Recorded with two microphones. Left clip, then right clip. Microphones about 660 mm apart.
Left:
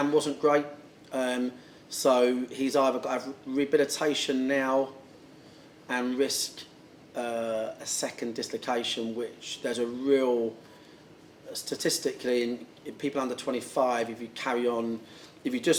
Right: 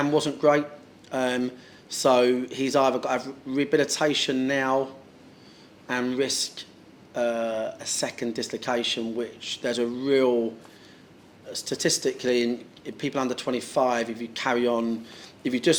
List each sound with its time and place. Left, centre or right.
0.0 s speech: right
5.9 s speech: right
11.5 s speech: right